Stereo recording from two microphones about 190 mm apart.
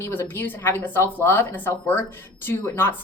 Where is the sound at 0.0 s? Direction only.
10° left (ahead or behind).